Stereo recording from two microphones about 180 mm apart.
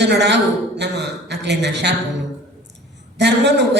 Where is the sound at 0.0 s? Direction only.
70° right (ahead or behind).